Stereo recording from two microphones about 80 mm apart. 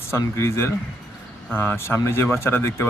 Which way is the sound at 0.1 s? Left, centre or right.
Left.